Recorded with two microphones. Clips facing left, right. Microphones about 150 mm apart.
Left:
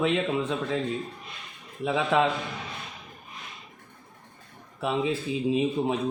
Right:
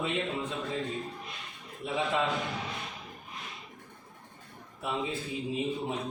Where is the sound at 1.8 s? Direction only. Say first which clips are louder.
Left 6 dB; 90° left.